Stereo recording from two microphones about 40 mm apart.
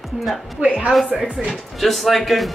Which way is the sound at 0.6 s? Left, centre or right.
Right.